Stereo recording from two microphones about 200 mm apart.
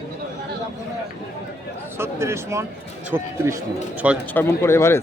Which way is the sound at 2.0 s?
15° right (ahead or behind).